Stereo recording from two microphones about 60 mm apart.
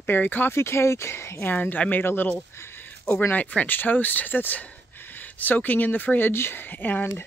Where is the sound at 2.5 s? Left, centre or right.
Left.